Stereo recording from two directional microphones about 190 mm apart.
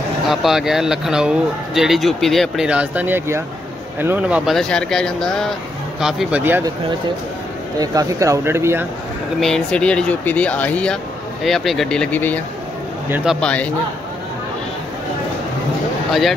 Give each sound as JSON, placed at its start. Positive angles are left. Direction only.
{"t": 0.3, "sound": "speech", "side_deg": 0}
{"t": 4.5, "sound": "speech", "side_deg": 5}
{"t": 7.8, "sound": "speech", "side_deg": -20}
{"t": 9.4, "sound": "speech", "side_deg": 5}
{"t": 13.1, "sound": "speech", "side_deg": -5}
{"t": 16.1, "sound": "speech", "side_deg": 0}